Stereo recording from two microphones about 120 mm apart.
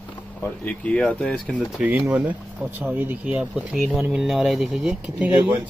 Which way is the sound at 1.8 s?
10° right (ahead or behind).